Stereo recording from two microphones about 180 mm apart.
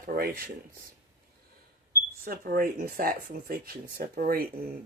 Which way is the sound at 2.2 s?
55° right (ahead or behind).